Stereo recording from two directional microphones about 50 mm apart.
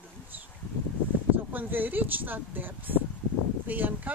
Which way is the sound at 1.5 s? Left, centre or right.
Right.